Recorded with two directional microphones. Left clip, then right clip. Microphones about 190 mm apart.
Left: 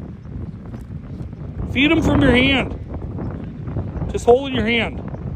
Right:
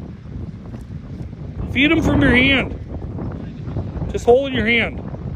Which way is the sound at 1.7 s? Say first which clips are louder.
Even; 20° left (ahead or behind).